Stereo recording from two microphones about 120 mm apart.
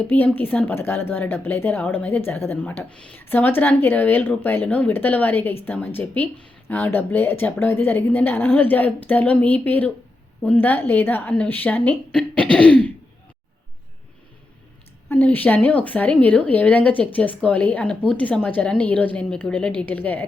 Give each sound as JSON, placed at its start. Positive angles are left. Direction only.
{"t": 0.0, "sound": "a woman's voice", "side_deg": 15}
{"t": 15.1, "sound": "a woman's voice", "side_deg": 15}